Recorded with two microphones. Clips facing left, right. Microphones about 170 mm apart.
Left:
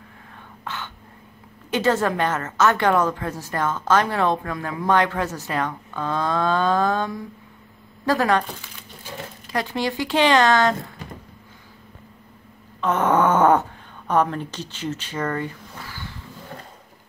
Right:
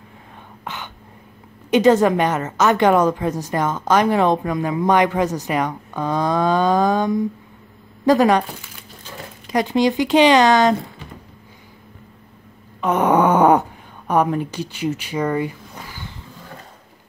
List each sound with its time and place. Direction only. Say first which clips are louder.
0.7 s throat clearing: right 1 dB; 15° right (ahead or behind)
1.7 s a woman's voice: right 7 dB; 15° right (ahead or behind)
9.5 s a woman's voice: right 8 dB; 20° right (ahead or behind)
12.8 s speech: right 3 dB; 15° right (ahead or behind)